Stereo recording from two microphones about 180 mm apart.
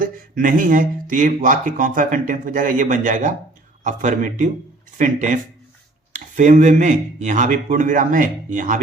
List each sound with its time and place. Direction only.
0.0 s speech: 50° right (ahead or behind)